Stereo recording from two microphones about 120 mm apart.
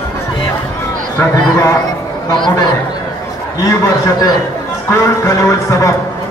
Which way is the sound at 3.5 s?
25° left (ahead or behind).